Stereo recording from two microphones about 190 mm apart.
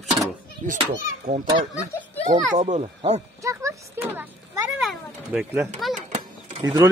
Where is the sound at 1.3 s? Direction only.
45° right (ahead or behind).